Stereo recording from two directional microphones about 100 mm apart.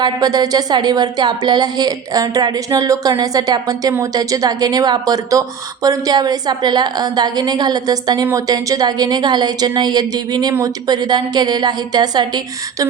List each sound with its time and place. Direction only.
0.0 s a woman's voice: 40° right (ahead or behind)